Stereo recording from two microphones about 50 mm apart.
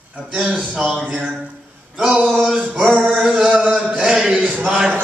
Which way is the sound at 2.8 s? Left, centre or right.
Right.